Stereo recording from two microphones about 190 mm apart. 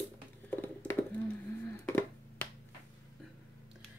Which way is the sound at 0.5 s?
10° left (ahead or behind).